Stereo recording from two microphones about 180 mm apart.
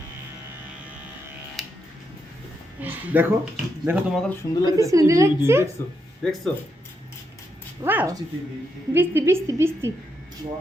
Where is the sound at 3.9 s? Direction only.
15° right (ahead or behind).